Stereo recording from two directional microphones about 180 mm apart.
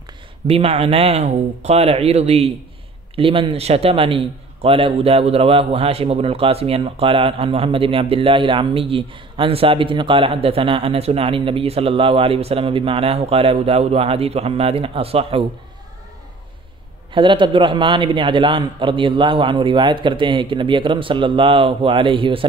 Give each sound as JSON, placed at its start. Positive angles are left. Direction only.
{"t": 0.5, "sound": "a man's voice", "side_deg": -35}
{"t": 17.1, "sound": "a man's voice", "side_deg": -25}